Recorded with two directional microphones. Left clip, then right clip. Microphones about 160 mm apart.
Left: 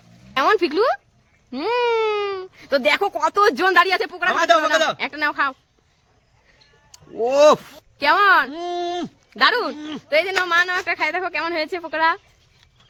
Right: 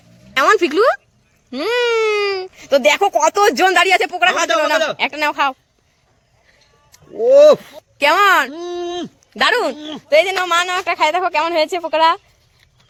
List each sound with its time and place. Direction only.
0.3 s a sound: 10° right (ahead or behind)
1.5 s speech: 5° right (ahead or behind)
4.4 s speech: 30° left (ahead or behind)
4.9 s speech: 5° right (ahead or behind)
7.9 s speech: 15° right (ahead or behind)
8.5 s speech: 35° left (ahead or behind)
9.4 s speech: 20° right (ahead or behind)
9.7 s speech: 30° left (ahead or behind)
10.1 s speech: 5° right (ahead or behind)